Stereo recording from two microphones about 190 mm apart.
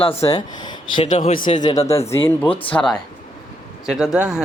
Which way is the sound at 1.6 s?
20° left (ahead or behind).